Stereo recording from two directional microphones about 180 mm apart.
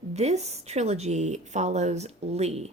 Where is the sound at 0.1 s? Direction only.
35° right (ahead or behind).